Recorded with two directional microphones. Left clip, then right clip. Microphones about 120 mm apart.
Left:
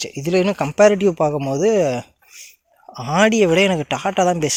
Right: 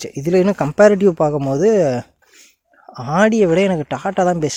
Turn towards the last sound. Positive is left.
turn(degrees=-40)  # may be behind; listen again after turning